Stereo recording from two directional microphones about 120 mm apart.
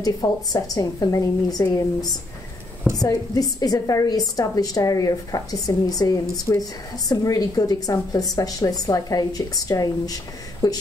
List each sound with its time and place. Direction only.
0.0 s a woman's voice: 35° left (ahead or behind)